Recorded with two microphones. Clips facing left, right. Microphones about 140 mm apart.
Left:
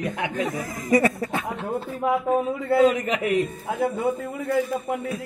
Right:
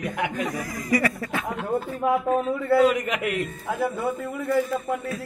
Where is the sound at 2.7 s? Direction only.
30° left (ahead or behind).